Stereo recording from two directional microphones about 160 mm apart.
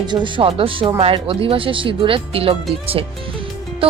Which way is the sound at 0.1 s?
30° right (ahead or behind).